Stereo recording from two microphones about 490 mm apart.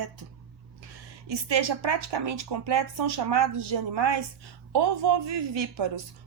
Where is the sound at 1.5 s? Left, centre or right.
Right.